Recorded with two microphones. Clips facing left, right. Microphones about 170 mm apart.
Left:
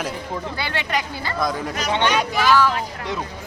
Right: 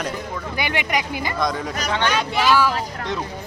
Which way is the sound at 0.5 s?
15° right (ahead or behind).